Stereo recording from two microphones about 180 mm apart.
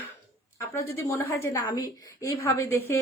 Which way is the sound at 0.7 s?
15° left (ahead or behind).